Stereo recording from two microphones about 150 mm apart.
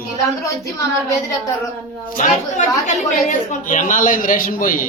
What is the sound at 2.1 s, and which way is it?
A woman's voice, 55° left (ahead or behind).